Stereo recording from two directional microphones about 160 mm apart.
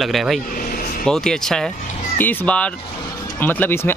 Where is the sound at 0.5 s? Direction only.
60° left (ahead or behind).